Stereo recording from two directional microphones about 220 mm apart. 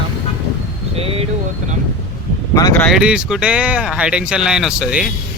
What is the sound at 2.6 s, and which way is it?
Speech, 15° left (ahead or behind).